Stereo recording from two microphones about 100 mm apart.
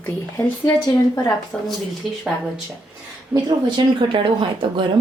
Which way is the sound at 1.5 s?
5° left (ahead or behind).